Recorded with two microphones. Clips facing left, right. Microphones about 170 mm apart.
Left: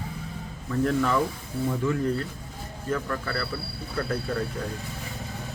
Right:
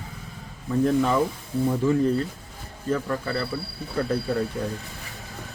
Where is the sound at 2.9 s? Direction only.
25° right (ahead or behind).